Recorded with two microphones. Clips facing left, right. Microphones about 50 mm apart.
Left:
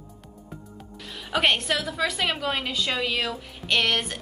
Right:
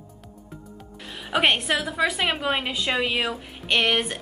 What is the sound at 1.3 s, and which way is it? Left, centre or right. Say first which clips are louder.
A woman's voice: right 2 dB; centre.